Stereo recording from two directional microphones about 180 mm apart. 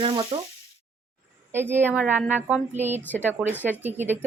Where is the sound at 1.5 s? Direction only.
10° right (ahead or behind).